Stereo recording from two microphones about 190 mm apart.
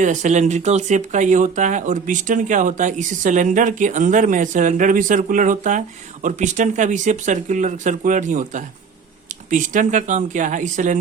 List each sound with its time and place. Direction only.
0.0 s speech: 40° right (ahead or behind)